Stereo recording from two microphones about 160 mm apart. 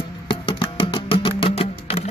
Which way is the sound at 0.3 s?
30° left (ahead or behind).